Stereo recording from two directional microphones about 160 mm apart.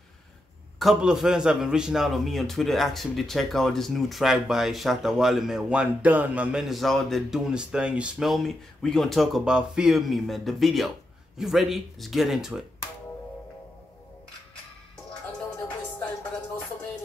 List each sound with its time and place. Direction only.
0.7 s a man's voice: centre (ahead or behind)